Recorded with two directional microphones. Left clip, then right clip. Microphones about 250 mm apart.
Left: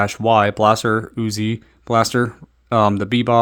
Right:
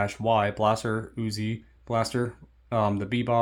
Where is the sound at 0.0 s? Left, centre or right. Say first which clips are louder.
Left 9 dB; left.